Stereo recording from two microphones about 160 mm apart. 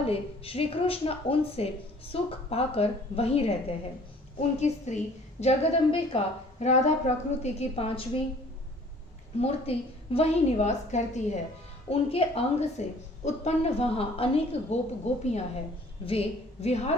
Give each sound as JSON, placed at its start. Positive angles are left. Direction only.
{"t": 0.0, "sound": "a woman's voice", "side_deg": 35}
{"t": 9.4, "sound": "a woman's voice", "side_deg": 40}